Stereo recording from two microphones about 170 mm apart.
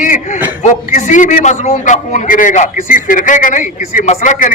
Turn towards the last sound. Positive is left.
turn(degrees=50)  # may be behind; listen again after turning